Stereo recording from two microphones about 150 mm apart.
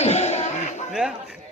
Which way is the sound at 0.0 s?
45° left (ahead or behind).